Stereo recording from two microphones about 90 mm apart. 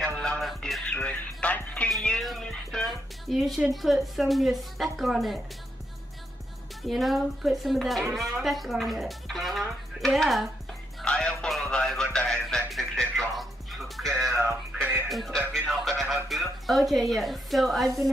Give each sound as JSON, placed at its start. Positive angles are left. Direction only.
{"t": 0.0, "sound": "music", "side_deg": 5}
{"t": 0.8, "sound": "music", "side_deg": 15}
{"t": 1.9, "sound": "music", "side_deg": 5}
{"t": 6.8, "sound": "speech", "side_deg": 0}
{"t": 11.0, "sound": "music", "side_deg": 5}
{"t": 14.3, "sound": "music", "side_deg": -30}
{"t": 15.0, "sound": "music", "side_deg": 0}
{"t": 16.3, "sound": "speech", "side_deg": 0}